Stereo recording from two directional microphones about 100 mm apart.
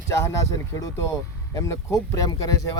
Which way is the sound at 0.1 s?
30° left (ahead or behind).